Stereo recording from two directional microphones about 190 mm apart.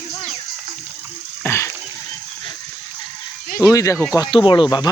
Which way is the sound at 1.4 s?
15° left (ahead or behind).